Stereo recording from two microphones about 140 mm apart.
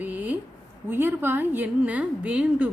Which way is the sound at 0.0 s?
10° right (ahead or behind).